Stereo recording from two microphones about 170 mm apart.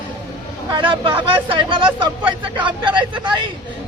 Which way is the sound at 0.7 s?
30° right (ahead or behind).